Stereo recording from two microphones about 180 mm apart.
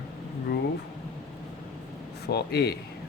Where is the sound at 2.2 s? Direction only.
65° left (ahead or behind).